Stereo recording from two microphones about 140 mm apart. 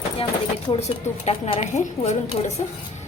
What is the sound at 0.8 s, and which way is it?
A woman's voice, 50° left (ahead or behind).